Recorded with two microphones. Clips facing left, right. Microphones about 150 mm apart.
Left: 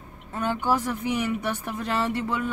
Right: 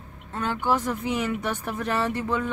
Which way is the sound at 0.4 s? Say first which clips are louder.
Left 1 dB; 15° left (ahead or behind).